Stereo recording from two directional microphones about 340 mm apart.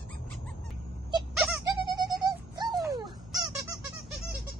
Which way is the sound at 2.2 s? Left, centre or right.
Centre.